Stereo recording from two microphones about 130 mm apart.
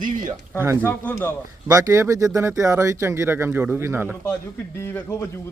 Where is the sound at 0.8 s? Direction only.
20° left (ahead or behind).